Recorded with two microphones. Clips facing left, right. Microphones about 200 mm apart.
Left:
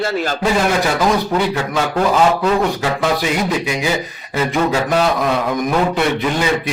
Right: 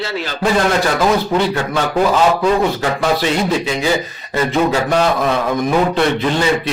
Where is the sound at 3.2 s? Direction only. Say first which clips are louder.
Right 2 dB; 10° left (ahead or behind).